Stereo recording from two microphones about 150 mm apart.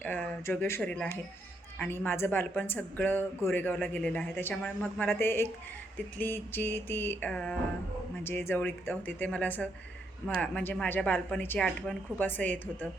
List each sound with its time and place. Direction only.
0.0 s speech: 10° left (ahead or behind)